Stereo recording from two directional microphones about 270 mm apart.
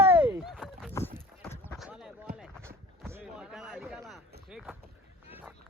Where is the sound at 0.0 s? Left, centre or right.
Centre.